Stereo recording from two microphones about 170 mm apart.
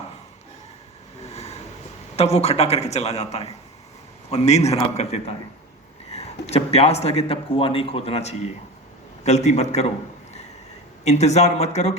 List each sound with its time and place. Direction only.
1.2 s vehicle: 40° left (ahead or behind)
2.1 s speech: 40° left (ahead or behind)
11.0 s speech: 40° left (ahead or behind)